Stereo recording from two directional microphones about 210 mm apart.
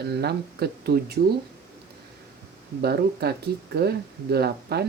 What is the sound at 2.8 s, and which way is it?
Speech, 50° right (ahead or behind).